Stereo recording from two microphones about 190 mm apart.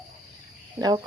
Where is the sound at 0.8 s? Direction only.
20° right (ahead or behind).